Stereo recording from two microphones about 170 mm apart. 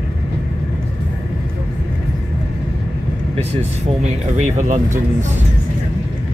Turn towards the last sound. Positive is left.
turn(degrees=-45)  # may be behind; listen again after turning